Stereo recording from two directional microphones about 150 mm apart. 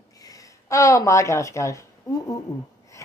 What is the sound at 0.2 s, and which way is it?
Speech, 25° left (ahead or behind).